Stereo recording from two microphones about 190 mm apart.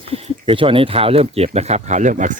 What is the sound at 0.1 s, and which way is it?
Speech, 30° right (ahead or behind).